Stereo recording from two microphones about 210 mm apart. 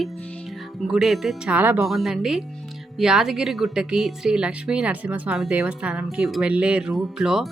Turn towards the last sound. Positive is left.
turn(degrees=0)  # may be behind; listen again after turning